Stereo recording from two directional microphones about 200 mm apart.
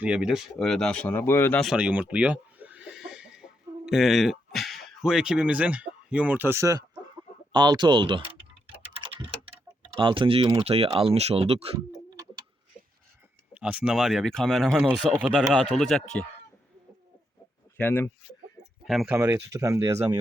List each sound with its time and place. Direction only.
0.0 s speech: 5° right (ahead or behind); by 8.4 s 25° right (ahead or behind)
9.0 s tick-tock: 25° right (ahead or behind)
10.0 s speech: 25° right (ahead or behind)
13.5 s speech: 5° right (ahead or behind)
17.7 s speech: 10° left (ahead or behind)
19.1 s speech: 15° right (ahead or behind)